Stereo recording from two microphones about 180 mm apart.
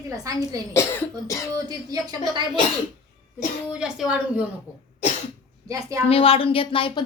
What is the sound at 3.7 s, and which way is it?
Speech, 5° right (ahead or behind).